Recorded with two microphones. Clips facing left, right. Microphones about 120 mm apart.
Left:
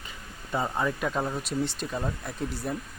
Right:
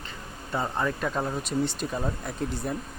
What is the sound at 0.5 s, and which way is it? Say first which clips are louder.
Speech: even; 5° left (ahead or behind).